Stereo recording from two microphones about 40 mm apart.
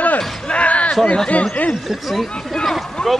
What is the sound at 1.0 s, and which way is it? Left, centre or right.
Speech, left.